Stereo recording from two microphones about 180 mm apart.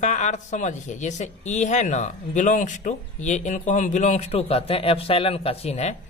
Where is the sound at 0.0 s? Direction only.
40° left (ahead or behind).